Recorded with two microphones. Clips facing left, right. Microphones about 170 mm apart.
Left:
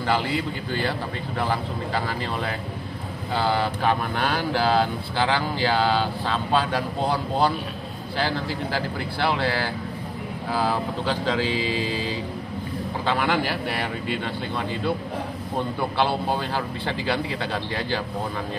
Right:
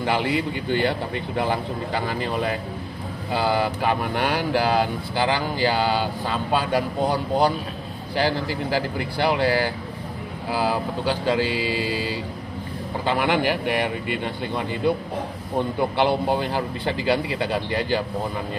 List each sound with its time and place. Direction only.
0.0 s speech: 15° right (ahead or behind)
10.5 s speech: 10° right (ahead or behind)
16.0 s speech: 15° right (ahead or behind)